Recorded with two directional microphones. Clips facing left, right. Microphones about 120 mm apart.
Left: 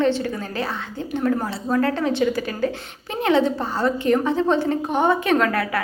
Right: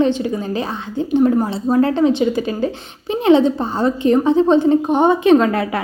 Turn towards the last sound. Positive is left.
turn(degrees=-25)  # may be behind; listen again after turning